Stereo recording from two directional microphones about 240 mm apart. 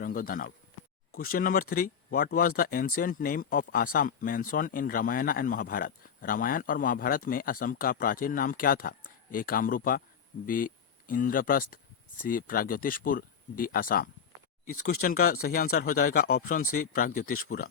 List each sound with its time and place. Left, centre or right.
0.0 s speech: left